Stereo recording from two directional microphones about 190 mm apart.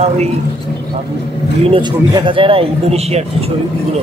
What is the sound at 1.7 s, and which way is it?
Speech, 25° right (ahead or behind).